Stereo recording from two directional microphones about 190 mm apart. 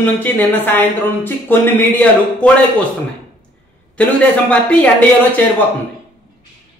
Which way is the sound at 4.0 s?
5° left (ahead or behind).